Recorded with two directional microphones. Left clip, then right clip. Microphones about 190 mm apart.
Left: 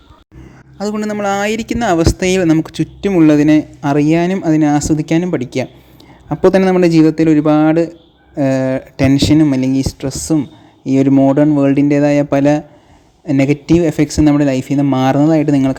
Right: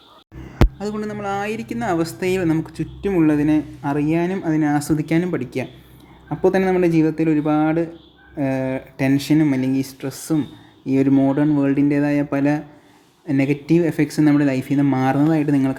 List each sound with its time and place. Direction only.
0.8 s speech: 35° left (ahead or behind)
1.0 s speech: 55° left (ahead or behind); by 15.8 s 35° left (ahead or behind)